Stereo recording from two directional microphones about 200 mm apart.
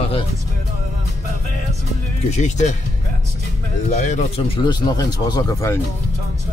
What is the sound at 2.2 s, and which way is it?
Speech, 35° left (ahead or behind).